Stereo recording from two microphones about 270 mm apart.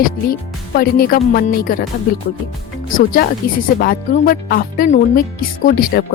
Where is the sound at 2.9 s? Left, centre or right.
Left.